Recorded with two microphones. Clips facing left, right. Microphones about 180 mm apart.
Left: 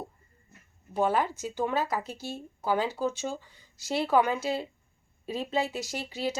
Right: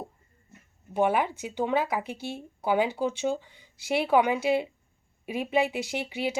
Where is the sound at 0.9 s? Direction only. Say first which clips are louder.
Right 2 dB; 15° right (ahead or behind).